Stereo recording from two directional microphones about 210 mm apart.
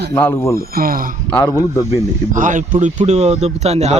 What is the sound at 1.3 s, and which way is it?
Speech, 15° left (ahead or behind).